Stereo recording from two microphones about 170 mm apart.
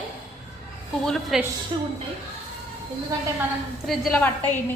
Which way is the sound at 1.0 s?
Centre (ahead or behind).